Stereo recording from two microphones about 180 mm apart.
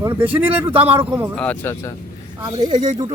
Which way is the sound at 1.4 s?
10° left (ahead or behind).